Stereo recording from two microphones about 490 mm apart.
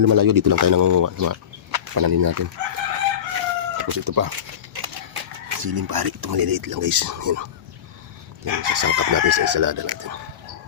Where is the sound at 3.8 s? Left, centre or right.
Right.